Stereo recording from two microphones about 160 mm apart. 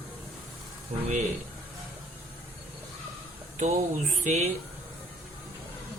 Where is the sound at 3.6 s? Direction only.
50° right (ahead or behind).